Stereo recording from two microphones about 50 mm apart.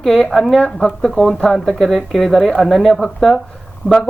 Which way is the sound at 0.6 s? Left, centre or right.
Centre.